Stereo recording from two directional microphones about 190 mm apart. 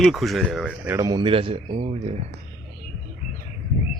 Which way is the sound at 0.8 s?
15° right (ahead or behind).